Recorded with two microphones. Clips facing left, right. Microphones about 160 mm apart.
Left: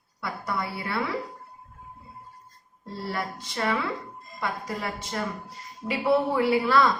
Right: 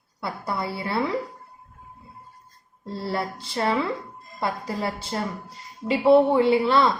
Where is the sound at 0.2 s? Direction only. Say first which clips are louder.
Right 2 dB; 30° right (ahead or behind).